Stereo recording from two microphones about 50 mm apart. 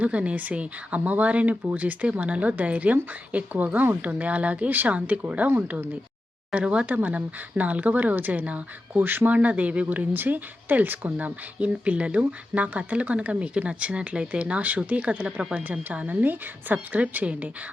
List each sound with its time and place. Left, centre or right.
0.0 s speech: right
6.5 s speech: right
9.0 s speech: right
10.1 s speech: right